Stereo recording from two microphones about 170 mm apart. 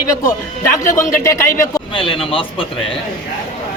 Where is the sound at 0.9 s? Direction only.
15° left (ahead or behind).